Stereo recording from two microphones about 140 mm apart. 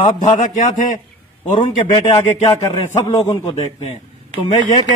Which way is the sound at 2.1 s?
40° left (ahead or behind).